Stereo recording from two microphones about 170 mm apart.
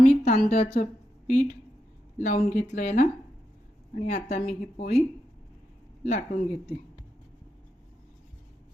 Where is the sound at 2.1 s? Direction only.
45° left (ahead or behind).